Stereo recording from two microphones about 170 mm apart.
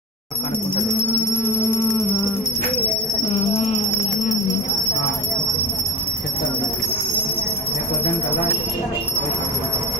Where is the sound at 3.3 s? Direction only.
35° left (ahead or behind).